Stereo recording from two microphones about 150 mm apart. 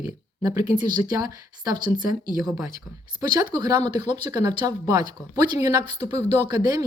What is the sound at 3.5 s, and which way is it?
Speech, 25° right (ahead or behind).